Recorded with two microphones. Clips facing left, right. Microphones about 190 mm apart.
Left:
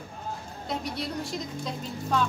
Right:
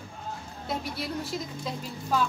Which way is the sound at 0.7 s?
Centre (ahead or behind).